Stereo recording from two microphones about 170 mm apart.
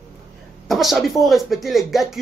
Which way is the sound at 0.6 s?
Centre (ahead or behind).